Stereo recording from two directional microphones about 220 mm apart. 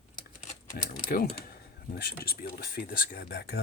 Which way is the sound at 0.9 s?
40° left (ahead or behind).